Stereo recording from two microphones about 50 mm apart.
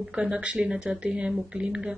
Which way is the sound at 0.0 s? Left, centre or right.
Right.